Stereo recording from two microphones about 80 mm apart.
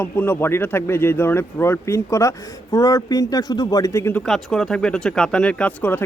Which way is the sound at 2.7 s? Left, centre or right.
Left.